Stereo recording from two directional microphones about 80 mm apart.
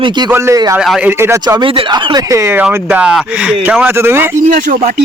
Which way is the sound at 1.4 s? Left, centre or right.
Right.